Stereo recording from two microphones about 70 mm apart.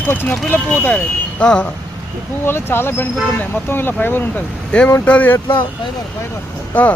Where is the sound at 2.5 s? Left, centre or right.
Left.